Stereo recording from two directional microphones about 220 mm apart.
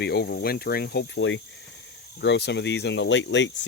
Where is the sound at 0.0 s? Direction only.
45° left (ahead or behind).